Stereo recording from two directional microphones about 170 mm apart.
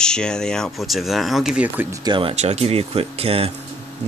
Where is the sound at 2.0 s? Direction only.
30° right (ahead or behind).